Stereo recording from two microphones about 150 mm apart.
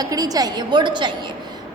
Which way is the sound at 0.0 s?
25° right (ahead or behind).